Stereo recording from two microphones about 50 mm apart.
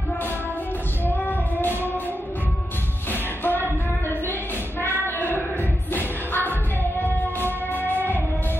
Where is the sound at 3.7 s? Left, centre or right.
Left.